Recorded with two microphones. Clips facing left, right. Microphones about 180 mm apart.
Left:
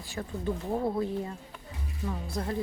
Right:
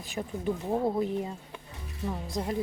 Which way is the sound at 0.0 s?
20° right (ahead or behind).